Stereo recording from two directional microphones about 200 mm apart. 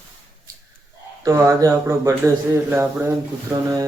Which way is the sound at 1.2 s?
15° right (ahead or behind).